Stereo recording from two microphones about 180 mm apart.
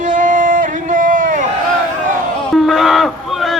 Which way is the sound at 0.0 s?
45° right (ahead or behind).